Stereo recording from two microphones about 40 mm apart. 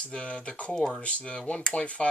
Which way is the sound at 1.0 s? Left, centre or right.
Left.